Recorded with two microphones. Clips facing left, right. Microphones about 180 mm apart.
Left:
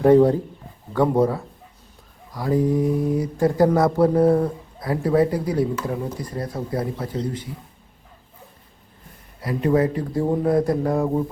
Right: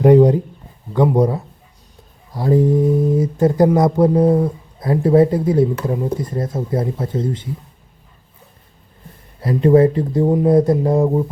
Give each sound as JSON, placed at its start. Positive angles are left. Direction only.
{"t": 0.0, "sound": "speech", "side_deg": -15}
{"t": 2.3, "sound": "speech", "side_deg": -25}
{"t": 4.8, "sound": "speech", "side_deg": -25}
{"t": 9.4, "sound": "speech", "side_deg": -25}